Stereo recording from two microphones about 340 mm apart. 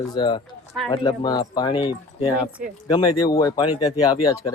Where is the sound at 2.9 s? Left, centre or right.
Centre.